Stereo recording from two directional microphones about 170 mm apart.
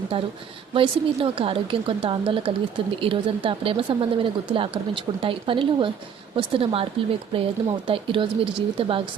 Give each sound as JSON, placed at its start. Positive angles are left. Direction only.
{"t": 0.7, "sound": "a woman's voice", "side_deg": -30}